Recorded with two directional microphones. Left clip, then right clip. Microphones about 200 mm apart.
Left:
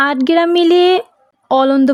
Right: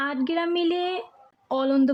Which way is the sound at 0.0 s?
45° left (ahead or behind).